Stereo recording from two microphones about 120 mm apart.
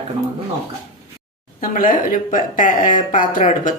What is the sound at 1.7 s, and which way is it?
Speech, 90° left.